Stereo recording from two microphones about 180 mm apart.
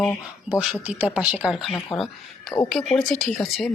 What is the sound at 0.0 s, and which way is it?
Speech, 10° left (ahead or behind).